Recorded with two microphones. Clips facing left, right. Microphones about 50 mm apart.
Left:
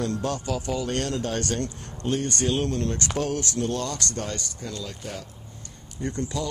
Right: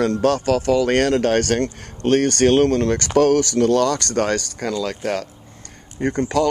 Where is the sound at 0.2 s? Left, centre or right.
Right.